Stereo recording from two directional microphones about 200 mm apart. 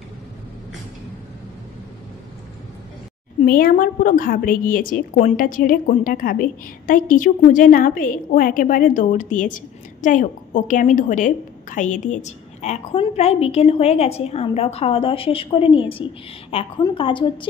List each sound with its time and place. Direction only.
3.3 s a woman's voice: 45° left (ahead or behind); by 17.5 s 25° left (ahead or behind)